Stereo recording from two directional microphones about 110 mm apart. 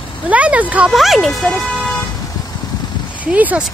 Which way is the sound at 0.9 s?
Centre (ahead or behind).